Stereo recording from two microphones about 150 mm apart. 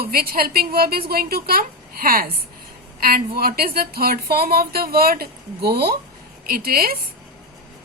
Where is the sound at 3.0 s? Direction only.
90° right.